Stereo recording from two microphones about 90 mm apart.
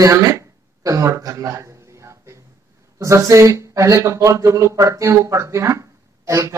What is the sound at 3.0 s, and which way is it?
Speech, 35° right (ahead or behind).